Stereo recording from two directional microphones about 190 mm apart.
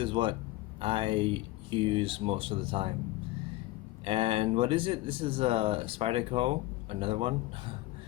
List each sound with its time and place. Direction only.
0.0 s speech: 25° right (ahead or behind)
4.0 s speech: 30° right (ahead or behind)